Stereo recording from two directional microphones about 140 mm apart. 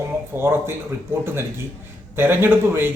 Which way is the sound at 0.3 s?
20° right (ahead or behind).